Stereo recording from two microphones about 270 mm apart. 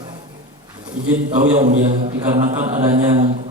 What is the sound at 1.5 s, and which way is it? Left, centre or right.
Speech, right.